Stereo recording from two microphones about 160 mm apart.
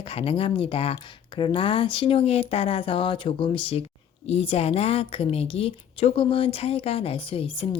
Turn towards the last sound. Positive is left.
turn(degrees=35)  # may be behind; listen again after turning